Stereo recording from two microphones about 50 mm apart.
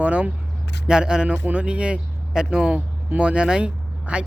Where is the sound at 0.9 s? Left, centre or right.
Centre.